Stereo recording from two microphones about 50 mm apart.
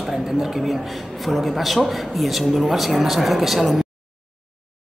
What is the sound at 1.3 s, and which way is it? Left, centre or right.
A man's voice, centre.